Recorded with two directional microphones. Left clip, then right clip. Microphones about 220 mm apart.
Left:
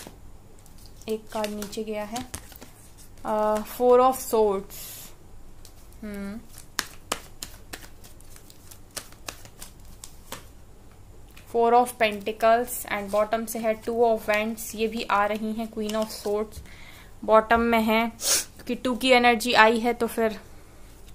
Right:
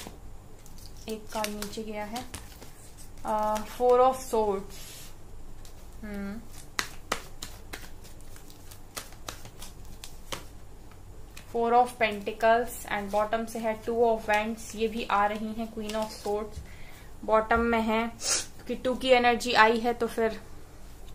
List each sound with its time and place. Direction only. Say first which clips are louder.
1.1 s speech: left 4 dB; 50° left (ahead or behind)
2.3 s a sound: left 3 dB; 30° left (ahead or behind)
3.2 s speech: left 4 dB; 50° left (ahead or behind)
6.8 s finger snapping: left 1 dB; 35° left (ahead or behind)
11.5 s speech: left 4 dB; 50° left (ahead or behind); by 20.4 s 30° left (ahead or behind)